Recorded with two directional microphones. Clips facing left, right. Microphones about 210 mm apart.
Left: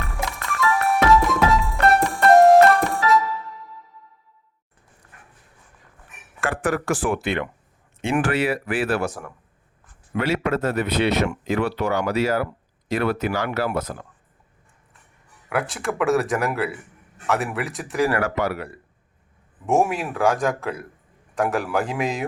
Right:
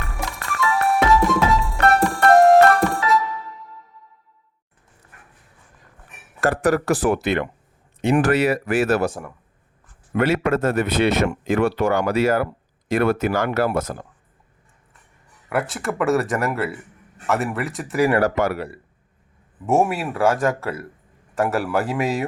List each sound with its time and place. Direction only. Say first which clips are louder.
0.5 s music: right 1 dB; centre (ahead or behind)
6.4 s speech: right 5 dB; 40° right (ahead or behind)
10.2 s speech: right 3 dB; 50° right (ahead or behind)
15.4 s speech: right 1 dB; centre (ahead or behind)
18.2 s speech: right 4 dB; 45° right (ahead or behind)
19.6 s speech: right 1 dB; centre (ahead or behind)